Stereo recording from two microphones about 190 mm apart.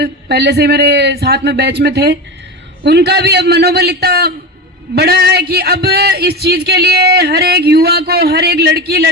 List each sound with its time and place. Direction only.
0.0 s speech: 60° right (ahead or behind)